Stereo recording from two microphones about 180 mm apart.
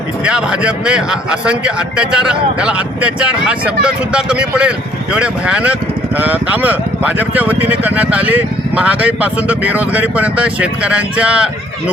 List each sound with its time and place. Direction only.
0.3 s speech: 5° right (ahead or behind)